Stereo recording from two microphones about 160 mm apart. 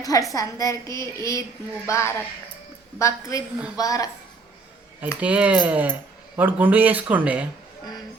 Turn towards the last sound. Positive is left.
turn(degrees=-10)  # may be behind; listen again after turning